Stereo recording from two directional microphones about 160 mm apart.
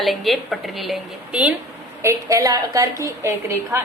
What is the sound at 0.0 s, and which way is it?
A woman's voice, centre (ahead or behind).